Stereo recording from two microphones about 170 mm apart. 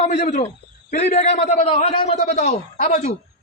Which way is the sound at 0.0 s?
40° left (ahead or behind).